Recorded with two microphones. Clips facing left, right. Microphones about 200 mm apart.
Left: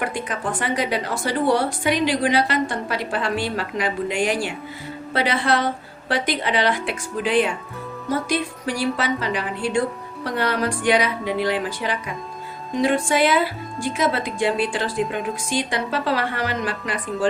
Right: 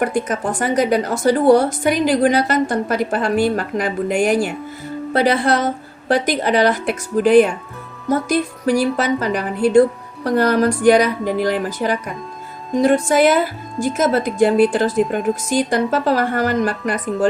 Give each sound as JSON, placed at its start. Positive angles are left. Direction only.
{"t": 0.0, "sound": "a woman's voice", "side_deg": -45}